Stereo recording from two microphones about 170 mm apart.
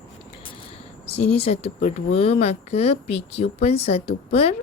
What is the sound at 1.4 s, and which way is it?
A woman's voice, 35° left (ahead or behind).